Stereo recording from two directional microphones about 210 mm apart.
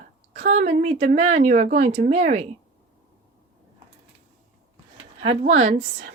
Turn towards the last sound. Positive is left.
turn(degrees=-30)  # may be behind; listen again after turning